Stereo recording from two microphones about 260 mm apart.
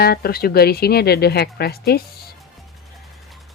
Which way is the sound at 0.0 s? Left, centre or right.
Left.